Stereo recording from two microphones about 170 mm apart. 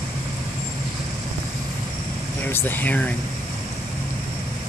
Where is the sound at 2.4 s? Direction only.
10° left (ahead or behind).